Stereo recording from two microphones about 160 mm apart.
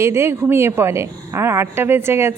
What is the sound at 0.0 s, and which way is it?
Speech, 15° right (ahead or behind).